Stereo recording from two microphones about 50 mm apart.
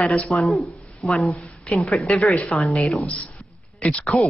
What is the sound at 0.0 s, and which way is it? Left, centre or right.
Speech, left.